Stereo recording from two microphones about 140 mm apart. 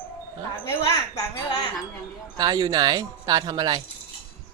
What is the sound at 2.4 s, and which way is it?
Speech, 30° right (ahead or behind).